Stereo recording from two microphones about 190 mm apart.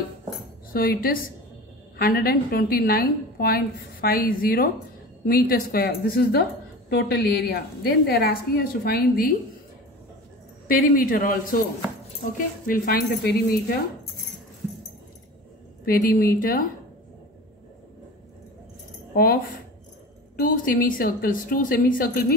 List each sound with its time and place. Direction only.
0.7 s a woman's voice: 50° left (ahead or behind)
10.7 s a woman's voice: 45° left (ahead or behind)
15.8 s a woman's voice: 50° left (ahead or behind)
19.1 s a woman's voice: 50° left (ahead or behind)